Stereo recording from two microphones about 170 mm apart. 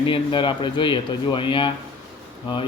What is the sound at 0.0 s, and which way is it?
Speech, 30° left (ahead or behind).